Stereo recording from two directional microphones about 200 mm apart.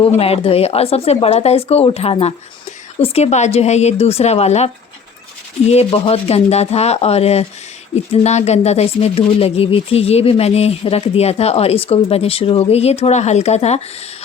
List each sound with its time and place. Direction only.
0.0 s speech: 30° left (ahead or behind)